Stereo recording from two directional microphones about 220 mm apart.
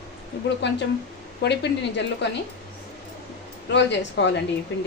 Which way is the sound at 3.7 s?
55° left (ahead or behind).